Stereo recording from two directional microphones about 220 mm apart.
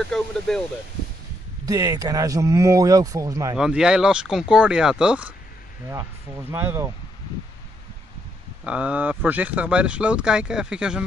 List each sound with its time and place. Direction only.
1.7 s speech: 15° right (ahead or behind)
3.5 s speech: 5° right (ahead or behind)
6.5 s speech: 10° right (ahead or behind)
8.6 s speech: 5° right (ahead or behind)